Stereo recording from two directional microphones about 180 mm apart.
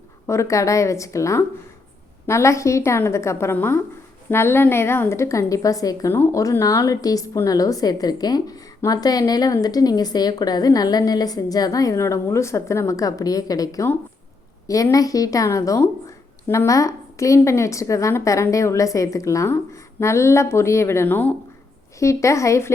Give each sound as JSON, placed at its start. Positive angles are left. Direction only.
{"t": 0.3, "sound": "a woman's voice", "side_deg": 15}